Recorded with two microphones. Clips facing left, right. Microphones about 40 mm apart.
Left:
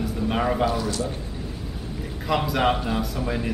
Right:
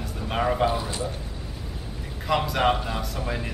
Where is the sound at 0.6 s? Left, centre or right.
Right.